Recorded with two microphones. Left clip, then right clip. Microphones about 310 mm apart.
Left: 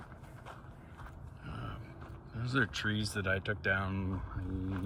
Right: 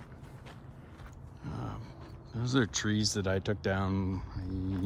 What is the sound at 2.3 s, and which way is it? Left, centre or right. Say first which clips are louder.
Speech: right 2 dB; centre.